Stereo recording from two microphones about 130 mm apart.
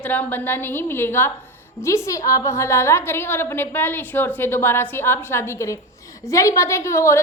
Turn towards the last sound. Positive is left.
turn(degrees=20)  # may be behind; listen again after turning